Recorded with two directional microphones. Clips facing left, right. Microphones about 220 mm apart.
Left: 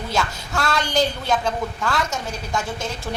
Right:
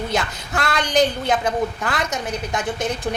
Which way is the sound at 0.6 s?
20° right (ahead or behind).